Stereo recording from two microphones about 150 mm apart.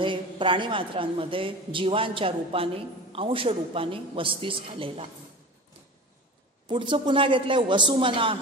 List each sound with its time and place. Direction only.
0.0 s a woman's voice: 35° right (ahead or behind)
6.7 s a woman's voice: 35° right (ahead or behind)